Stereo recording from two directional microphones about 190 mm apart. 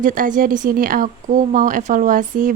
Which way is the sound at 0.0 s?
45° right (ahead or behind).